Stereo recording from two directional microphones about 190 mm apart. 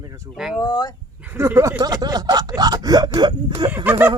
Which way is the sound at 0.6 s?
20° left (ahead or behind).